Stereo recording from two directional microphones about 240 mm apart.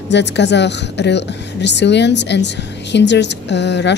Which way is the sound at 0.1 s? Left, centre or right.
Left.